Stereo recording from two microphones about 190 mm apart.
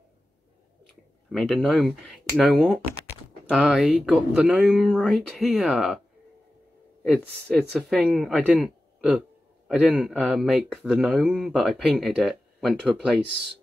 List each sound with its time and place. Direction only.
1.3 s speech: centre (ahead or behind)
7.0 s speech: 5° left (ahead or behind)